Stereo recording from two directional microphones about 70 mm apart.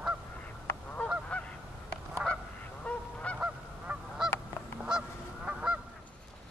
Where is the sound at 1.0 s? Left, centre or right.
Centre.